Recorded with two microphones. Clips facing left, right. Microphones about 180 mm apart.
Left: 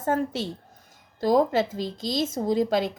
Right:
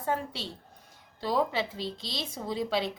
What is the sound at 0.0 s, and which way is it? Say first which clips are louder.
A woman's voice: left 7 dB; 45° left (ahead or behind).